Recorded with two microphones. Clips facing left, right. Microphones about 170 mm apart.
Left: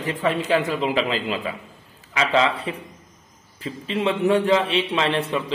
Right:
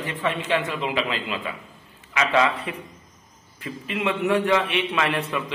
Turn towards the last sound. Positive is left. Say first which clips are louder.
# left 3 dB
turn(degrees=30)  # may be behind; listen again after turning